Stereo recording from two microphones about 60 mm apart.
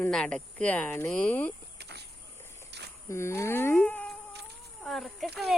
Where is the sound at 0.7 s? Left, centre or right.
Left.